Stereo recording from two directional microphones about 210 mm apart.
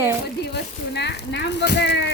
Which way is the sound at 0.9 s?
55° left (ahead or behind).